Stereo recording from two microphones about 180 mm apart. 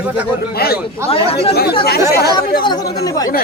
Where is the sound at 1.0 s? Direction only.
35° left (ahead or behind).